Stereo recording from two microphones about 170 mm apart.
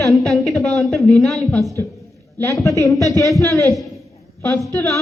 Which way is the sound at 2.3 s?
15° left (ahead or behind).